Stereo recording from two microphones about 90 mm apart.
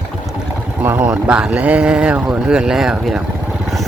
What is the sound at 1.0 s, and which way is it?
Speech, 10° right (ahead or behind).